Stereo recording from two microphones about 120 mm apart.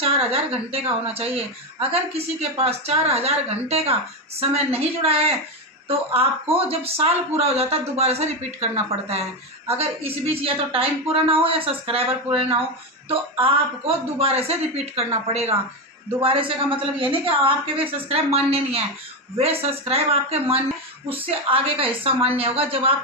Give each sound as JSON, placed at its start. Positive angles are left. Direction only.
{"t": 0.0, "sound": "speech", "side_deg": -55}
{"t": 9.7, "sound": "a woman's voice", "side_deg": -55}
{"t": 16.2, "sound": "a woman's voice", "side_deg": -50}